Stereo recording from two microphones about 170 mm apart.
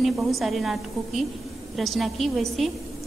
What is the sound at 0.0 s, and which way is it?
A woman's voice, centre (ahead or behind).